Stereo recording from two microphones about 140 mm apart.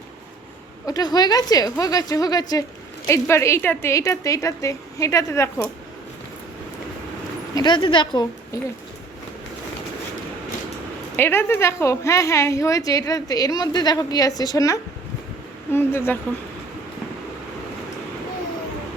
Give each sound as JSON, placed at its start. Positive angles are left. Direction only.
{"t": 0.9, "sound": "a woman's voice", "side_deg": 30}
{"t": 7.5, "sound": "a woman's voice", "side_deg": 35}
{"t": 11.2, "sound": "a woman's voice", "side_deg": 15}